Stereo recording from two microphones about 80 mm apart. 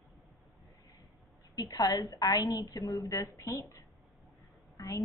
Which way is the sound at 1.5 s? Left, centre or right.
Left.